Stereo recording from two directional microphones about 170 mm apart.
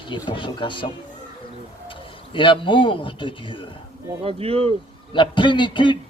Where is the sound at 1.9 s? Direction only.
30° left (ahead or behind).